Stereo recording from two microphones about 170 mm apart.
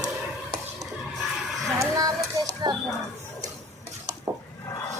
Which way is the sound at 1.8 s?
20° right (ahead or behind).